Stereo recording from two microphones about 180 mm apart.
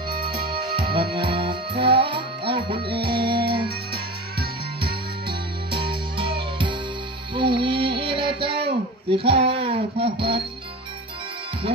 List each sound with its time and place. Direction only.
0.8 s music: 60° right (ahead or behind)
1.1 s music: 25° right (ahead or behind)
5.7 s music: 30° right (ahead or behind)